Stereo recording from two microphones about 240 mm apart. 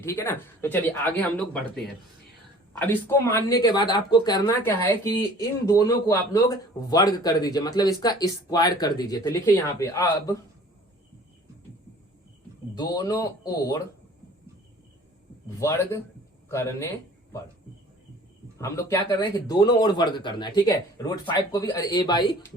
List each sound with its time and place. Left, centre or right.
0.0 s speech: centre
12.7 s speech: centre
15.4 s speech: centre
18.6 s speech: centre